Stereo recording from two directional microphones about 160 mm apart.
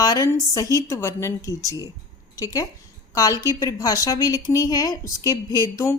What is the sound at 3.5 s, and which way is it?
A woman's voice, 20° left (ahead or behind).